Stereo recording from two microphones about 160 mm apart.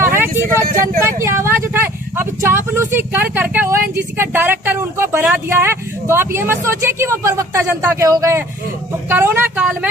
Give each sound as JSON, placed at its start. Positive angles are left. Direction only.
{"t": 0.0, "sound": "vehicle", "side_deg": -15}
{"t": 1.0, "sound": "speech", "side_deg": -15}